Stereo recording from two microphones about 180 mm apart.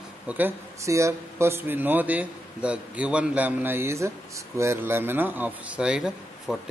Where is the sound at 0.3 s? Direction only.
10° right (ahead or behind).